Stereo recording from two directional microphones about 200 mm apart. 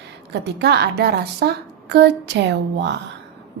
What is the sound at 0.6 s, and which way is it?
A woman's voice, 55° right (ahead or behind).